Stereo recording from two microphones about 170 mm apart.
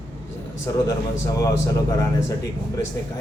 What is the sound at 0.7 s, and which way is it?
Speech, 20° left (ahead or behind).